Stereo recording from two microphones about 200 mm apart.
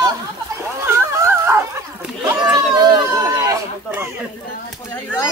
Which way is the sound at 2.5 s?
15° right (ahead or behind).